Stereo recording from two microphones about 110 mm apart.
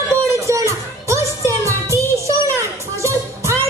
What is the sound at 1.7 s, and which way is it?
Music, 25° right (ahead or behind).